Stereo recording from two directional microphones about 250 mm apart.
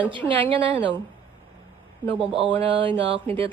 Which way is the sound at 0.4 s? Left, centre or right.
Right.